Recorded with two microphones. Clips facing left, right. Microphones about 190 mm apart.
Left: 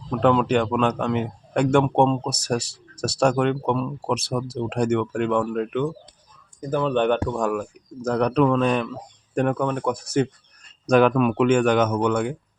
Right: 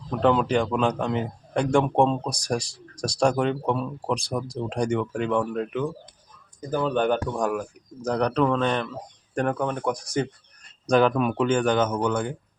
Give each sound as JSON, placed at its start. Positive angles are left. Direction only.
{"t": 0.1, "sound": "speech", "side_deg": 0}